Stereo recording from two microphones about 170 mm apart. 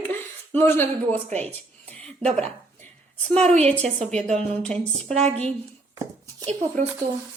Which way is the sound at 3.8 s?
40° right (ahead or behind).